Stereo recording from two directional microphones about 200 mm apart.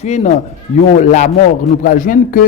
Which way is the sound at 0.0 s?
35° left (ahead or behind).